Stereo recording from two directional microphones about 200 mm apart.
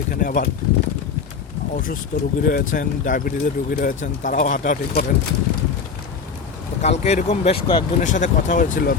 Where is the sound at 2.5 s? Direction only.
40° left (ahead or behind).